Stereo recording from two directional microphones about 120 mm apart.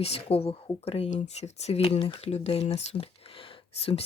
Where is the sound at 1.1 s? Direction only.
70° left (ahead or behind).